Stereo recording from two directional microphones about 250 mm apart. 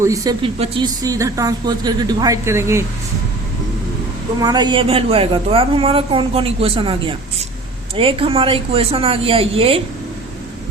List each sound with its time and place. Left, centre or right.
0.0 s speech: centre
4.4 s a woman's voice: centre